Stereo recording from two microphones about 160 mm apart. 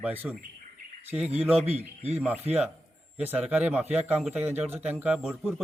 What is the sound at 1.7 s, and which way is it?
Speech, 40° right (ahead or behind).